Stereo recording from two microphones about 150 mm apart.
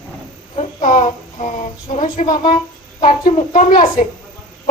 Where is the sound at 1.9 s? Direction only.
55° left (ahead or behind).